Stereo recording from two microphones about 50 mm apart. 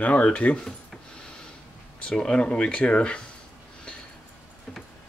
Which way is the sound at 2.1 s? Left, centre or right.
Centre.